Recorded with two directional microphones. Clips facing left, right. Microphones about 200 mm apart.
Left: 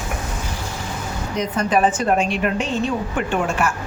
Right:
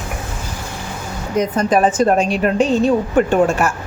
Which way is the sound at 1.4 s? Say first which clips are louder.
Right 4 dB; 40° right (ahead or behind).